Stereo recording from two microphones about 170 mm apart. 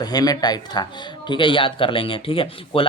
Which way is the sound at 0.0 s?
25° left (ahead or behind).